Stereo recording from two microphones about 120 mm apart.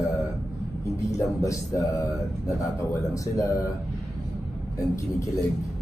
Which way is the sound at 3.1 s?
25° left (ahead or behind).